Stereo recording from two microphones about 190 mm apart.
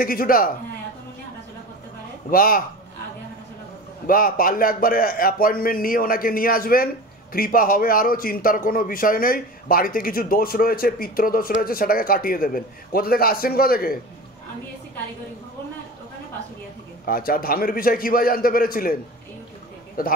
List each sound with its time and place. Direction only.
0.0 s a man's voice: 50° left (ahead or behind)
2.3 s a man's voice: 50° left (ahead or behind)
4.1 s a man's voice: 50° left (ahead or behind)
17.0 s a man's voice: 50° left (ahead or behind)
20.0 s a man's voice: 50° left (ahead or behind)